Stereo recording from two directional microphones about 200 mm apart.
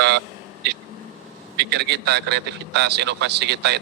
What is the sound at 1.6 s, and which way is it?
A man's voice, 55° right (ahead or behind).